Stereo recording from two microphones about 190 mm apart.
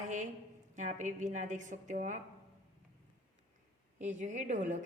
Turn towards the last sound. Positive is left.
turn(degrees=-40)  # may be behind; listen again after turning